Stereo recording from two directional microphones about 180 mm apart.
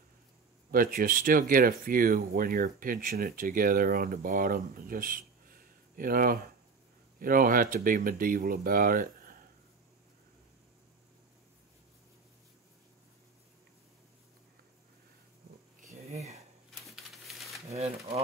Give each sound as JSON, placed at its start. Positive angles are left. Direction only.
{"t": 0.7, "sound": "speech", "side_deg": -55}
{"t": 16.8, "sound": "a sound", "side_deg": 0}
{"t": 17.7, "sound": "speech", "side_deg": -35}